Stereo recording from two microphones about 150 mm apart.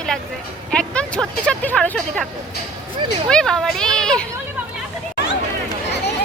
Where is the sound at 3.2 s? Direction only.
5° left (ahead or behind).